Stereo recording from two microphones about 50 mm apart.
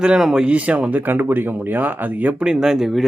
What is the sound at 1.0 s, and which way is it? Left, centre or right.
Speech, right.